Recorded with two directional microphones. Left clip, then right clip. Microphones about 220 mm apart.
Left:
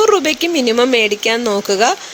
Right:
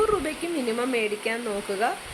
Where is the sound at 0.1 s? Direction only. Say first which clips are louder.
Left 13 dB; 45° left (ahead or behind).